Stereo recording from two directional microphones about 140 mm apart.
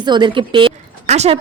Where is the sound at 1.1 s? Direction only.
50° right (ahead or behind).